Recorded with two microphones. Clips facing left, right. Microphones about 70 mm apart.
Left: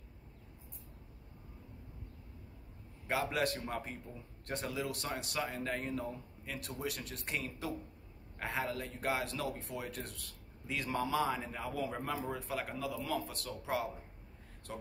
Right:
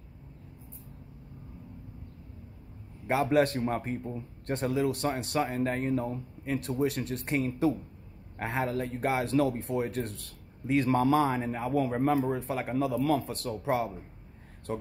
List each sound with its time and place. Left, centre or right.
3.1 s speech: right
12.7 s speech: right